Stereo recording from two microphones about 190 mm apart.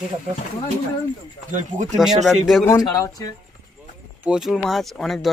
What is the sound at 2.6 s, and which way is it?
Speech, 15° left (ahead or behind).